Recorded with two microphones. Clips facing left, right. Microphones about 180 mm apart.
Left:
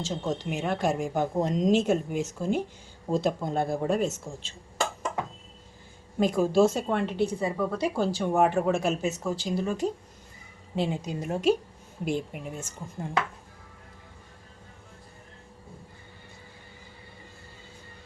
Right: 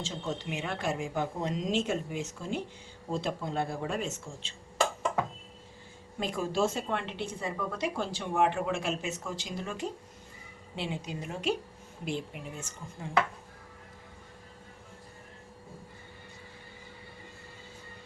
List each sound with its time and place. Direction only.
0.0 s a woman's voice: 45° left (ahead or behind)
6.1 s a woman's voice: 40° left (ahead or behind)